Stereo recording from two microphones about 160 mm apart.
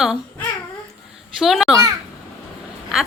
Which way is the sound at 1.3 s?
Centre (ahead or behind).